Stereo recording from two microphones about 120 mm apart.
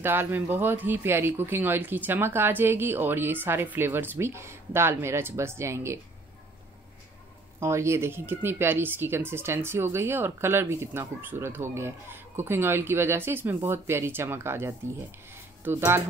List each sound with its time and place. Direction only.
0.0 s speech: 20° right (ahead or behind)
7.6 s speech: 20° right (ahead or behind)